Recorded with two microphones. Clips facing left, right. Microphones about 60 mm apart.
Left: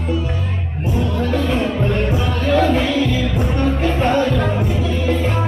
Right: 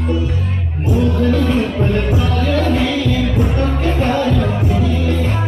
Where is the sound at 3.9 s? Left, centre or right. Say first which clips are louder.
Right 2 dB; centre.